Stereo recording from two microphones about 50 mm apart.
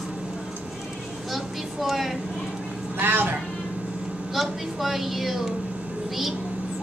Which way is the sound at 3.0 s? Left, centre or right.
Right.